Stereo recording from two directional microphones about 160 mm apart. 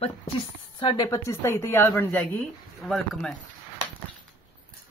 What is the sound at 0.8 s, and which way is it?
Speech, 30° left (ahead or behind).